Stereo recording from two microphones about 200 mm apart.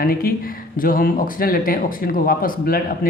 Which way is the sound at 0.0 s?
50° left (ahead or behind).